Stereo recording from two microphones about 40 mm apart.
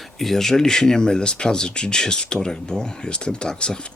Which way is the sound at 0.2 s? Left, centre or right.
Centre.